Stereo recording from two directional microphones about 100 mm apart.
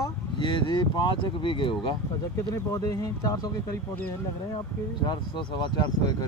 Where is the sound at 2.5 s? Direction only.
35° left (ahead or behind).